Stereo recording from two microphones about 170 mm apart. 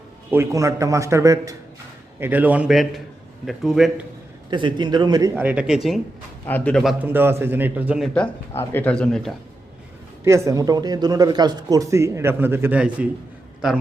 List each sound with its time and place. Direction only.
0.3 s a man's voice: 15° right (ahead or behind)
4.5 s a man's voice: 25° right (ahead or behind)
5.4 s a man's voice: 10° right (ahead or behind)
6.4 s speech: 10° left (ahead or behind)
7.0 s speech: 10° right (ahead or behind)
8.1 s speech: 10° left (ahead or behind)
10.2 s speech: 15° right (ahead or behind)